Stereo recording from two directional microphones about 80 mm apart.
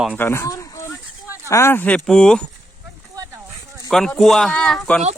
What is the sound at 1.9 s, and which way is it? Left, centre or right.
Speech, centre.